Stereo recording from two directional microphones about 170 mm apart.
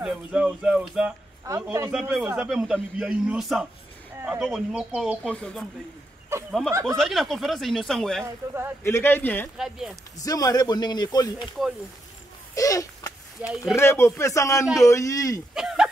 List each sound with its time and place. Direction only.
0.0 s speech: 5° right (ahead or behind)
1.4 s a man's voice: 20° right (ahead or behind)
1.9 s a man's voice: 5° right (ahead or behind)
6.7 s a man's voice: 20° right (ahead or behind)
7.0 s a man's voice: centre (ahead or behind)
8.8 s a man's voice: 15° left (ahead or behind)
9.6 s a man's voice: 5° right (ahead or behind)
10.1 s speech: 20° left (ahead or behind)
12.5 s a sound: 20° left (ahead or behind)
13.7 s a man's voice: 15° left (ahead or behind)
15.5 s a sound: 5° right (ahead or behind)